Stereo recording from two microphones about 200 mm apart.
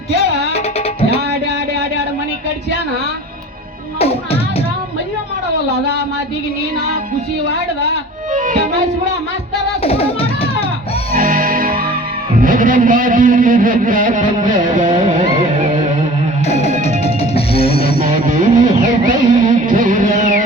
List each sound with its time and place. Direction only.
4.0 s music: 30° left (ahead or behind)
8.3 s music: 40° right (ahead or behind)
9.8 s music: 30° left (ahead or behind)
11.1 s music: 45° right (ahead or behind)
12.4 s a man's voice: 45° right (ahead or behind)
16.5 s music: 30° left (ahead or behind)
18.3 s music: 40° right (ahead or behind)